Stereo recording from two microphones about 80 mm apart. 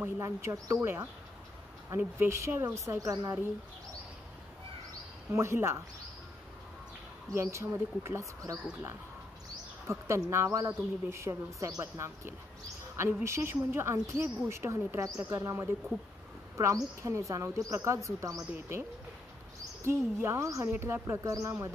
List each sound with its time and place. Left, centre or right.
0.2 s speech: right
2.2 s speech: right
5.3 s speech: right
7.3 s speech: right
9.8 s speech: right
19.8 s speech: right